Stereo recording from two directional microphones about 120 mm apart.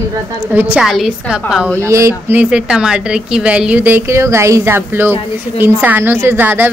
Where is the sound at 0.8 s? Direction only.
5° right (ahead or behind).